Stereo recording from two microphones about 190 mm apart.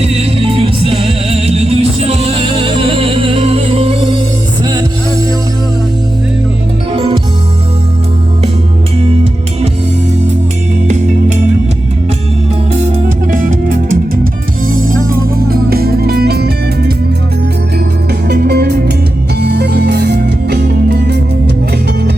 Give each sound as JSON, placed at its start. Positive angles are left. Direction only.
{"t": 0.0, "sound": "music", "side_deg": -30}
{"t": 6.9, "sound": "music", "side_deg": -25}
{"t": 10.8, "sound": "music", "side_deg": -40}
{"t": 13.3, "sound": "music", "side_deg": -45}
{"t": 18.3, "sound": "music", "side_deg": -55}